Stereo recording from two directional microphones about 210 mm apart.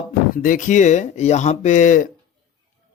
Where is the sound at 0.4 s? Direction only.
35° left (ahead or behind).